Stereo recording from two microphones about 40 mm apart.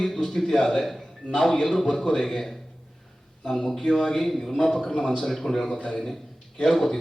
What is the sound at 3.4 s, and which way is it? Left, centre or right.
A man's voice, centre.